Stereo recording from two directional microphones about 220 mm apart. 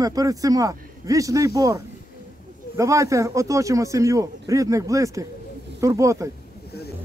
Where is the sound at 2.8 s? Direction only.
15° right (ahead or behind).